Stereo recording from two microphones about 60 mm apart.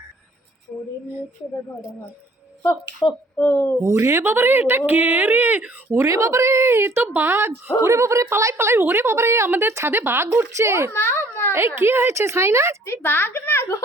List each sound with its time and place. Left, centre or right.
0.7 s a sound: left
3.3 s a woman's voice: left
3.8 s speech: right
4.2 s speech: right
5.9 s speech: right
7.9 s a woman's voice: right
8.5 s speech: right
10.9 s a sound: left
11.5 s speech: right
12.8 s a woman's voice: left